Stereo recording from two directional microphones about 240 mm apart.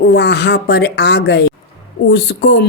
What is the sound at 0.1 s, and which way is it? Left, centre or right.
Speech, left.